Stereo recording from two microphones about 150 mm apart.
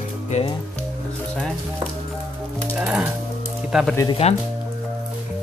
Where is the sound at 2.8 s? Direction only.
10° right (ahead or behind).